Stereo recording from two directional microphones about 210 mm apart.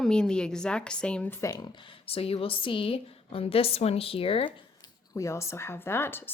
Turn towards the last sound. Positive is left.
turn(degrees=10)  # may be behind; listen again after turning